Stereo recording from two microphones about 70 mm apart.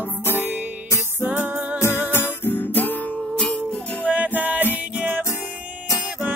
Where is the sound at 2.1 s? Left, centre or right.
Left.